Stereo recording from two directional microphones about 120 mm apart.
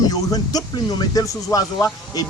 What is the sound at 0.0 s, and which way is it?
Speech, 30° left (ahead or behind).